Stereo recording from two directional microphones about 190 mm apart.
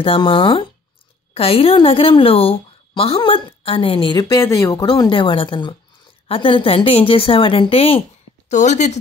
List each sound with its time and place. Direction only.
0.0 s a woman's voice: 30° left (ahead or behind)